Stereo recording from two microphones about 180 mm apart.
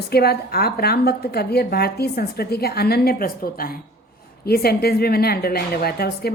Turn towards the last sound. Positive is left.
turn(degrees=60)  # may be behind; listen again after turning